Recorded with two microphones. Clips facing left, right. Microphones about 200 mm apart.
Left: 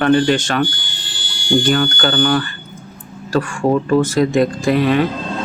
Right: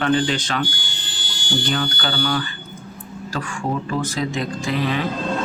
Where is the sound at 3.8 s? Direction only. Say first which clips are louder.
Left 9 dB; 50° left (ahead or behind).